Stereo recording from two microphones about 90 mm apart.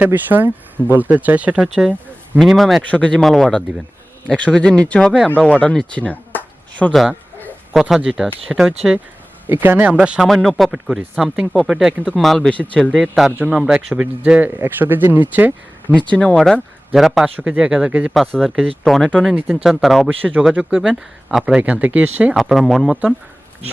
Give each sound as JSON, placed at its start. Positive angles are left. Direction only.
{"t": 0.0, "sound": "speech", "side_deg": -20}
{"t": 2.9, "sound": "speech", "side_deg": 10}
{"t": 6.9, "sound": "speech", "side_deg": 0}
{"t": 9.5, "sound": "speech", "side_deg": -20}
{"t": 10.2, "sound": "speech", "side_deg": 0}
{"t": 12.9, "sound": "speech", "side_deg": -5}
{"t": 16.1, "sound": "speech", "side_deg": 10}
{"t": 17.2, "sound": "speech", "side_deg": -15}
{"t": 18.3, "sound": "speech", "side_deg": 0}
{"t": 20.1, "sound": "speech", "side_deg": -15}
{"t": 22.4, "sound": "speech", "side_deg": -5}